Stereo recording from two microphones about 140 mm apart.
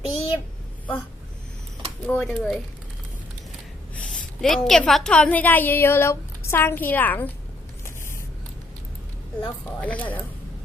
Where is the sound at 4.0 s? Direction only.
5° left (ahead or behind).